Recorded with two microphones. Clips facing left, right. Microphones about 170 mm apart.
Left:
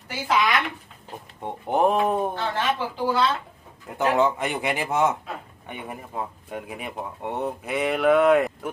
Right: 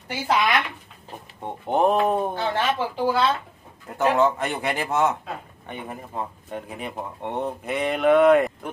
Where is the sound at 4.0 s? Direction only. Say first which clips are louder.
Right 1 dB; 15° left (ahead or behind).